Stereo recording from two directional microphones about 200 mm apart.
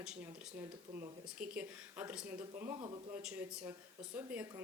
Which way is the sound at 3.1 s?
5° right (ahead or behind).